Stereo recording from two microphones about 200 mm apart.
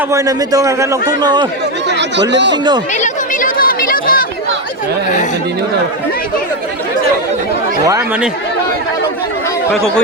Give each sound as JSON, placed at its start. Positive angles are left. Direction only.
{"t": 0.1, "sound": "a man's voice", "side_deg": -15}
{"t": 1.9, "sound": "speech", "side_deg": -60}
{"t": 2.9, "sound": "a sound", "side_deg": 40}
{"t": 7.9, "sound": "a man's voice", "side_deg": -15}